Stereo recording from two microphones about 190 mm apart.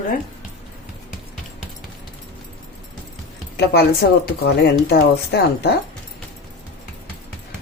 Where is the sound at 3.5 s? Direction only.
55° left (ahead or behind).